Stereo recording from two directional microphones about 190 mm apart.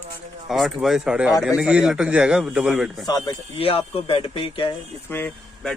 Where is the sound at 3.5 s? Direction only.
30° left (ahead or behind).